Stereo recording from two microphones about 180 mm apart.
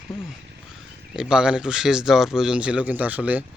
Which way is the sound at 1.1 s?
5° right (ahead or behind).